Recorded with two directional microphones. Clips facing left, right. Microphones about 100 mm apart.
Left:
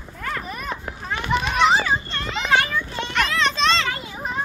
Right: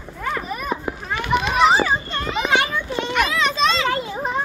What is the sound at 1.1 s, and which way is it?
Children playing, 5° right (ahead or behind).